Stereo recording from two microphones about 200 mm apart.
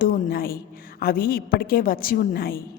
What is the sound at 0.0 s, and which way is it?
A woman's voice, 45° left (ahead or behind).